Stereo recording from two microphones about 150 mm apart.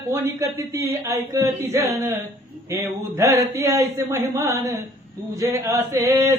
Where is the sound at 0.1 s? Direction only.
20° right (ahead or behind).